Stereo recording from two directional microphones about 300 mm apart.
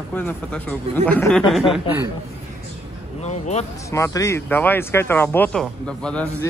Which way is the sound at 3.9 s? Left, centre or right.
Centre.